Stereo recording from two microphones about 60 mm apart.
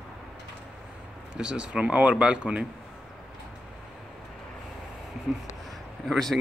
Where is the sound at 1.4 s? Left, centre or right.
Centre.